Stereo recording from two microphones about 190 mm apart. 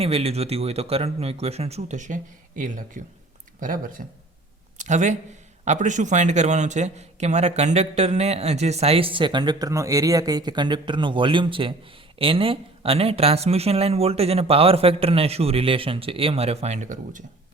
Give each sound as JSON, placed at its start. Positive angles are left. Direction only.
{"t": 0.0, "sound": "a man's voice", "side_deg": -30}